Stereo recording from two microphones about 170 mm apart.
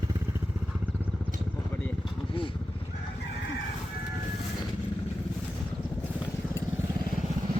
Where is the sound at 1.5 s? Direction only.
15° left (ahead or behind).